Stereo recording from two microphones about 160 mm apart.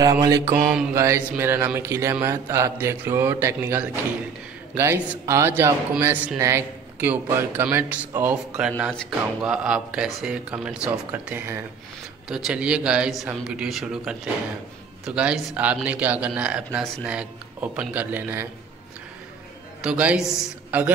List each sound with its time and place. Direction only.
0.0 s mantra: 20° right (ahead or behind)
0.9 s a man's voice: 15° right (ahead or behind)
19.8 s a man's voice: 5° right (ahead or behind)